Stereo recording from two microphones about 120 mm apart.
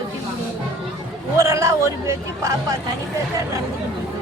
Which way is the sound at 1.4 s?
25° right (ahead or behind).